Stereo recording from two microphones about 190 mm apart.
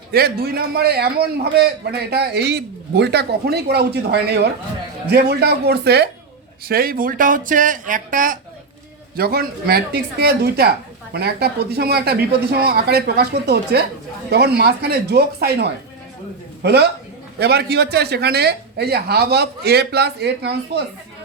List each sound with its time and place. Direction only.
0.1 s a woman's voice: 55° right (ahead or behind)